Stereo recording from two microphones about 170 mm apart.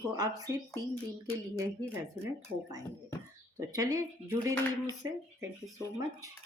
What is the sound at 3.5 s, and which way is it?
Speech, 20° right (ahead or behind).